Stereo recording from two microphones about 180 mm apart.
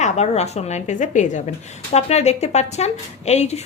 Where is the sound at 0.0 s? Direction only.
35° left (ahead or behind).